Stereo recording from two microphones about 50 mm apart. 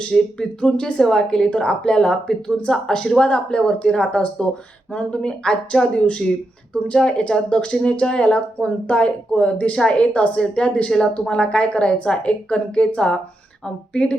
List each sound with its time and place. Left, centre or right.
0.1 s a woman's voice: centre